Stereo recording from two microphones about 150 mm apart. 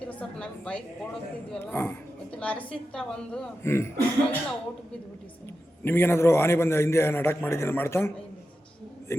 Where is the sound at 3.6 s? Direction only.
15° left (ahead or behind).